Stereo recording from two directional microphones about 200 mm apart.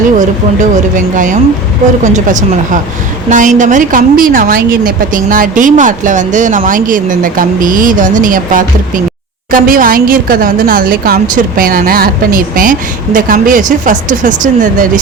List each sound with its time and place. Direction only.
0.2 s a woman's voice: 40° right (ahead or behind)